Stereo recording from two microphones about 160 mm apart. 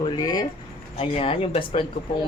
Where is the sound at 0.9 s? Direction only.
35° left (ahead or behind).